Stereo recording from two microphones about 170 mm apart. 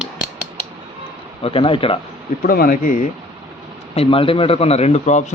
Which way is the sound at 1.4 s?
30° left (ahead or behind).